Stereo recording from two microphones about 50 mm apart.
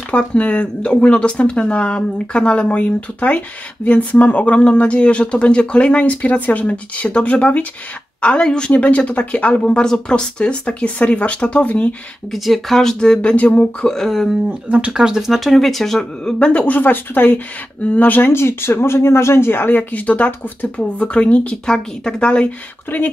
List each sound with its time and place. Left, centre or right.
0.1 s speech: left
12.3 s speech: centre; by 13.5 s left
13.8 s speech: centre
14.7 s speech: right
15.0 s speech: centre
16.3 s speech: left
18.3 s speech: left
19.5 s speech: left; by 22.5 s centre
22.9 s speech: left